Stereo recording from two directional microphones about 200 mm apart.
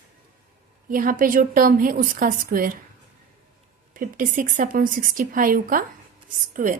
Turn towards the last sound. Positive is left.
turn(degrees=-40)  # may be behind; listen again after turning